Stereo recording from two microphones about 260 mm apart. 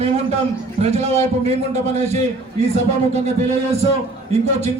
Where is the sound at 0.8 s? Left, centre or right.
Right.